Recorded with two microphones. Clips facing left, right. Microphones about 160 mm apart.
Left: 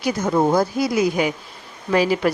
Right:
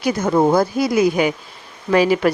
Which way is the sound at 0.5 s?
60° right (ahead or behind).